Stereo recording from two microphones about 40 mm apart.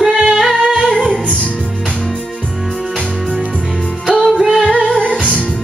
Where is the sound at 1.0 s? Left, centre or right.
Left.